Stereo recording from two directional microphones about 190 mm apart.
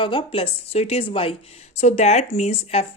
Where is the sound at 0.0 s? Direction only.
25° left (ahead or behind).